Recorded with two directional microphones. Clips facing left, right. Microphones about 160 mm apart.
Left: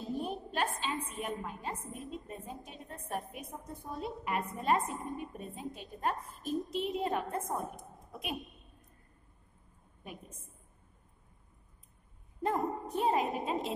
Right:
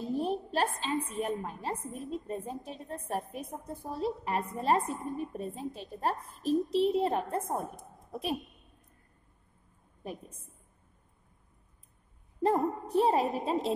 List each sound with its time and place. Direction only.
0.2 s a sound: 35° right (ahead or behind)
0.7 s a woman's voice: 35° right (ahead or behind)
12.4 s a woman's voice: 30° right (ahead or behind)